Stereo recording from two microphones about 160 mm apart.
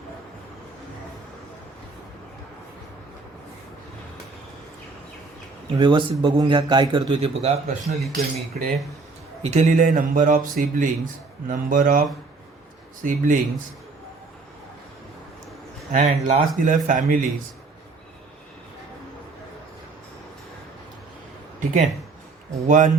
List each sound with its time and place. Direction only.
5.7 s speech: 30° right (ahead or behind)
8.1 s speech: 70° right (ahead or behind)
9.4 s a man's voice: 45° right (ahead or behind)
15.9 s speech: 55° right (ahead or behind)
22.6 s speech: 50° right (ahead or behind)